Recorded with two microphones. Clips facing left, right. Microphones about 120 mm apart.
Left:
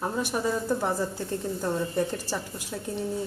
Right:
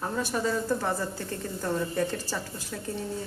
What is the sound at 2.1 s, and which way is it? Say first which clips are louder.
Speech: left 1 dB; 15° left (ahead or behind).